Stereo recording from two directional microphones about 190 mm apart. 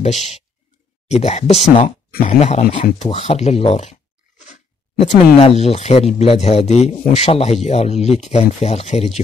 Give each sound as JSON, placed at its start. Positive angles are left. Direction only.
{"t": 0.0, "sound": "speech", "side_deg": 35}
{"t": 4.4, "sound": "a sound", "side_deg": 35}
{"t": 5.4, "sound": "speech", "side_deg": 35}